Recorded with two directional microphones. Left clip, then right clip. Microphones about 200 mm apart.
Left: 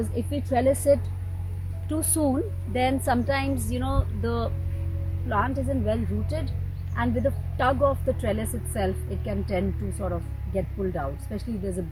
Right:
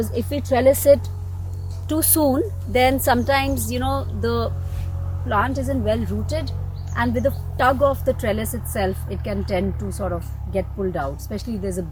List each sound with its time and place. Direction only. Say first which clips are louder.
0.3 s a woman's voice: right 7 dB; 30° right (ahead or behind); by 4.5 s 10° right (ahead or behind)
5.3 s speech: right 5 dB; centre (ahead or behind)